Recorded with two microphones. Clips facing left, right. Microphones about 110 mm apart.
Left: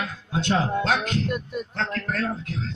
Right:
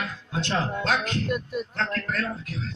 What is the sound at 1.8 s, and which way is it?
Speech, 20° left (ahead or behind).